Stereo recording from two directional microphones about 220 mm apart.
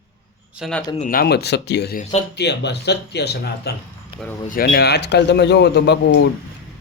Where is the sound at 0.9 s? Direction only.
40° left (ahead or behind).